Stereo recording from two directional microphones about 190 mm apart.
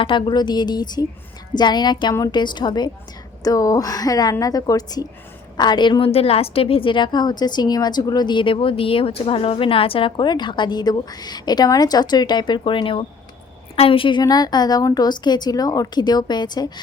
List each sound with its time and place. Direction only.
0.0 s a woman's voice: 25° left (ahead or behind)